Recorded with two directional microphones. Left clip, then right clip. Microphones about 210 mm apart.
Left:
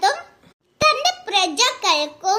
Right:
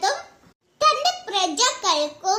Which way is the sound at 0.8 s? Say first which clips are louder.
Left 2 dB; 35° left (ahead or behind).